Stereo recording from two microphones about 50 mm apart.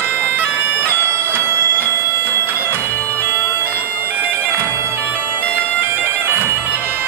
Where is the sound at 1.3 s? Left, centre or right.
Right.